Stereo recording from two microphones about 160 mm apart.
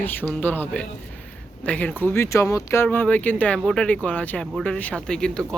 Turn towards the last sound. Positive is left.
turn(degrees=5)  # may be behind; listen again after turning